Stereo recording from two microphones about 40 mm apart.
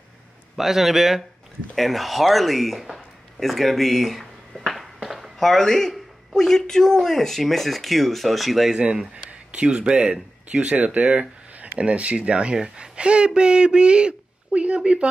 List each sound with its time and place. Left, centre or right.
0.6 s speech: centre
1.8 s a sound: centre
5.4 s speech: centre
8.7 s speech: right